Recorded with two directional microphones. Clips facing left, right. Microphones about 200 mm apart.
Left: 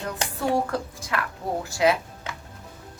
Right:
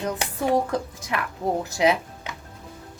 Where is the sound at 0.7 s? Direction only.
20° right (ahead or behind).